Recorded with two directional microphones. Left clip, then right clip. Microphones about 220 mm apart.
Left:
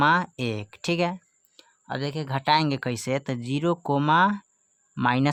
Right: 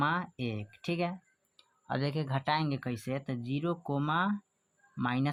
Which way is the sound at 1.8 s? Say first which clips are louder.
Left 4 dB; 10° left (ahead or behind).